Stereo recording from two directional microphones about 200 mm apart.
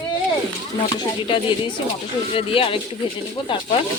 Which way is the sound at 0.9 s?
25° left (ahead or behind).